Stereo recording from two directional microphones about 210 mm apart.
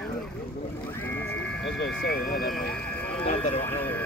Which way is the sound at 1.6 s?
55° left (ahead or behind).